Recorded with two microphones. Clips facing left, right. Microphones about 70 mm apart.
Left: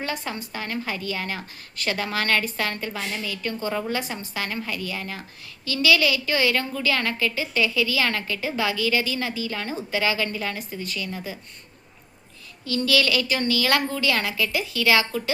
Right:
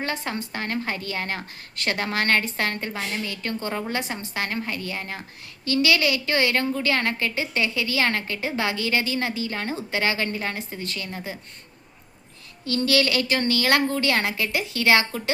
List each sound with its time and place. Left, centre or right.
0.1 s a woman's voice: right
5.6 s a woman's voice: right
12.6 s a woman's voice: right